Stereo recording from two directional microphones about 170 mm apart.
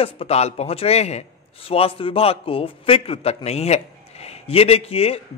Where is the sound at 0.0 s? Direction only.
35° left (ahead or behind).